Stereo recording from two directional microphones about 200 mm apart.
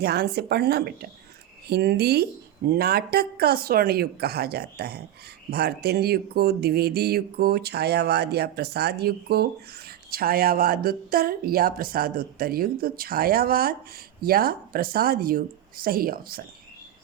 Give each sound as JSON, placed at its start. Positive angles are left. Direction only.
{"t": 0.0, "sound": "speech", "side_deg": -55}